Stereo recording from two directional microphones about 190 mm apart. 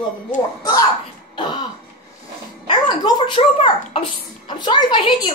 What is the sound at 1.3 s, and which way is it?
Throat clearing, 20° left (ahead or behind).